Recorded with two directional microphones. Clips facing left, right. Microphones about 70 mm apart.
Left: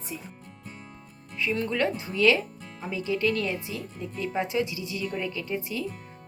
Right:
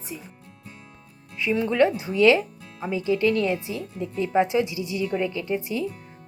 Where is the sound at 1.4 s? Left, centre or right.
Centre.